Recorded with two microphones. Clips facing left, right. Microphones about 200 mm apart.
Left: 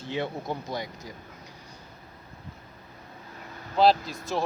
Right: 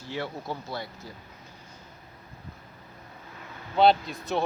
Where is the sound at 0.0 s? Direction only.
20° left (ahead or behind).